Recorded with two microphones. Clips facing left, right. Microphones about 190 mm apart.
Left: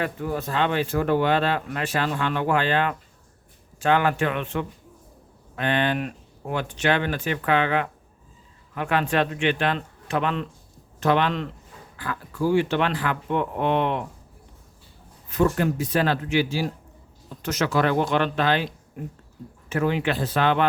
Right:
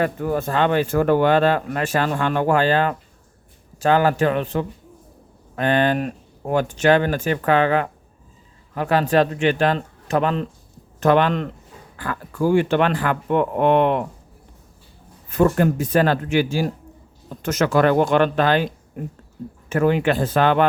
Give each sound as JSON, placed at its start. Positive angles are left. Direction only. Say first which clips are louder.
{"t": 0.0, "sound": "speech", "louder": "right 6 dB", "side_deg": -50}
{"t": 15.3, "sound": "speech", "louder": "right 4 dB", "side_deg": -50}